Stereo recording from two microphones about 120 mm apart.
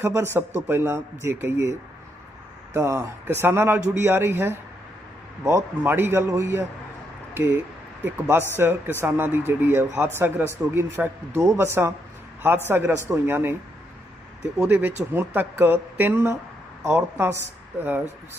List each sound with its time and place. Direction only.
0.0 s a man's voice: 20° right (ahead or behind)
2.7 s a man's voice: 25° right (ahead or behind)
14.6 s a man's voice: 15° right (ahead or behind)